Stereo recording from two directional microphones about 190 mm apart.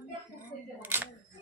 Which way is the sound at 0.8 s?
10° right (ahead or behind).